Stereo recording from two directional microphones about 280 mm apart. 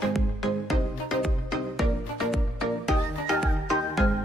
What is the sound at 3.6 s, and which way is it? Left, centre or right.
Music, centre.